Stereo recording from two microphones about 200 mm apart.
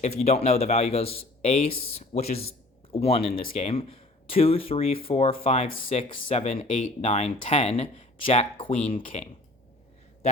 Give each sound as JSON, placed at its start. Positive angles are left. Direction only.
{"t": 0.2, "sound": "a man's voice", "side_deg": 30}